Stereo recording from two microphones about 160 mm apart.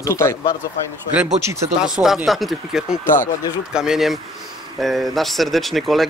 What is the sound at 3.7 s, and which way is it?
Speech, 5° right (ahead or behind).